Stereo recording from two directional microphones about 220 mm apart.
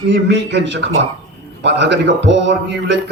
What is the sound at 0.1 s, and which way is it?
A man's voice, 55° right (ahead or behind).